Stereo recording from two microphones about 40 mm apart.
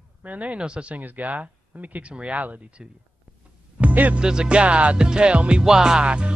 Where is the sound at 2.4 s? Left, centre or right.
Right.